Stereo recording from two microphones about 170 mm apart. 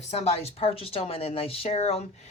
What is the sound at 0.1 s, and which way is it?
Speech, 40° left (ahead or behind).